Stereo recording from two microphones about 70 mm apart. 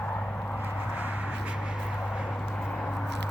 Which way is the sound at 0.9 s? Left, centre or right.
Right.